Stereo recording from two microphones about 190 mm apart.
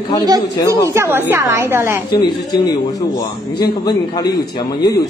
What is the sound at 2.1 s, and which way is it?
Speech, 20° left (ahead or behind).